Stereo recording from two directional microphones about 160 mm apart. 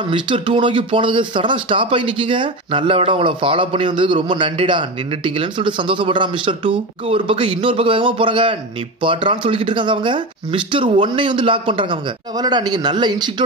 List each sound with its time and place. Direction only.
0.1 s speech: 30° right (ahead or behind)